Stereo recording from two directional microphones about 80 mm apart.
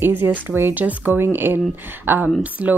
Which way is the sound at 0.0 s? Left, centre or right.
Right.